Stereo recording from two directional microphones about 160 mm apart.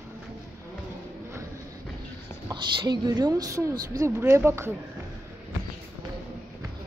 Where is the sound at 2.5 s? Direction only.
25° right (ahead or behind).